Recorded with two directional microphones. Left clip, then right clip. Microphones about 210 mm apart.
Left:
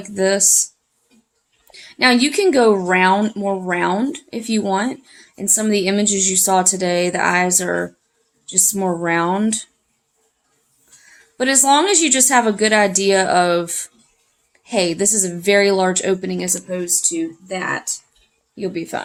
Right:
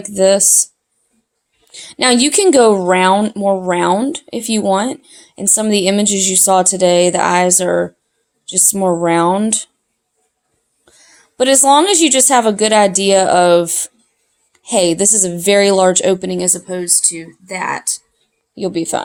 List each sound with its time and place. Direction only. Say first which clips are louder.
0.0 s a woman's voice: right 6 dB; 25° right (ahead or behind)
1.7 s a woman's voice: right 2 dB; 30° right (ahead or behind)
11.3 s a woman's voice: right 5 dB; 30° right (ahead or behind); by 17.9 s 45° right (ahead or behind)
18.6 s a woman's voice: right 6 dB; 30° right (ahead or behind)